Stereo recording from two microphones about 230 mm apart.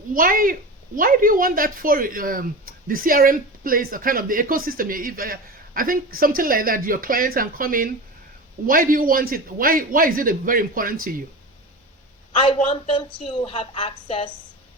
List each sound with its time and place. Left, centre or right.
0.1 s speech: right
12.3 s a woman's voice: left